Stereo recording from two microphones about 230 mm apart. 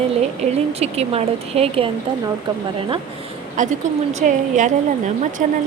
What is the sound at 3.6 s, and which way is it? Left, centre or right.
Speech, right.